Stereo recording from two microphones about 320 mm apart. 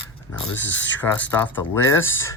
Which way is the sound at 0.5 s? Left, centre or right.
Left.